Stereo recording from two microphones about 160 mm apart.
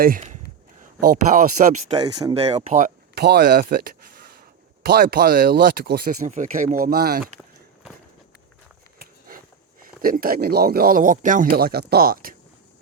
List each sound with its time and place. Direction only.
0.8 s speech: 55° right (ahead or behind)
1.9 s speech: 25° right (ahead or behind)
2.4 s speech: 40° right (ahead or behind)
3.2 s speech: 90° right
6.1 s a man's voice: 50° right (ahead or behind); by 7.3 s 75° right (ahead or behind)
9.0 s biting: 65° right (ahead or behind)
9.8 s a man's voice: 60° right (ahead or behind)